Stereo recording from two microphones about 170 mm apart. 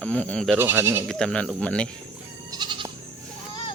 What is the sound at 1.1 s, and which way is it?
Speech, 5° left (ahead or behind).